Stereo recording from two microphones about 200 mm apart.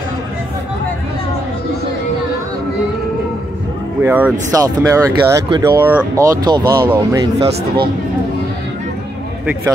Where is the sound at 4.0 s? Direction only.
10° right (ahead or behind).